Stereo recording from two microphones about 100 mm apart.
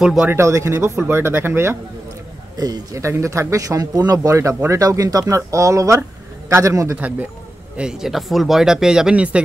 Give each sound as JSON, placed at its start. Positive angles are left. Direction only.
{"t": 0.0, "sound": "speech", "side_deg": -5}
{"t": 0.3, "sound": "speech", "side_deg": -30}
{"t": 2.5, "sound": "speech", "side_deg": -40}
{"t": 7.0, "sound": "speech", "side_deg": -15}